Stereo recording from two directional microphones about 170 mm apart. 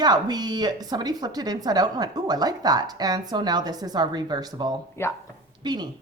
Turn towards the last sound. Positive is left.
turn(degrees=-25)  # may be behind; listen again after turning